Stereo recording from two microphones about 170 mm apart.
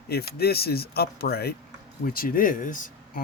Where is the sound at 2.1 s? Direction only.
55° left (ahead or behind).